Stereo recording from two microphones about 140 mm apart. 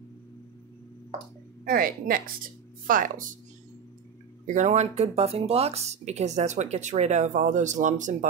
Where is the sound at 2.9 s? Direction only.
70° right (ahead or behind).